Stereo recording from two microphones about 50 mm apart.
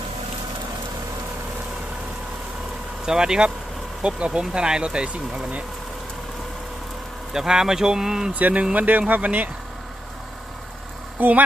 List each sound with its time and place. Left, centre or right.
3.1 s speech: centre
7.3 s speech: centre
8.4 s speech: right
11.2 s speech: right